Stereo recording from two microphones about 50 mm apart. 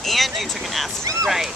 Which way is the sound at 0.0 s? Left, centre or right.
Centre.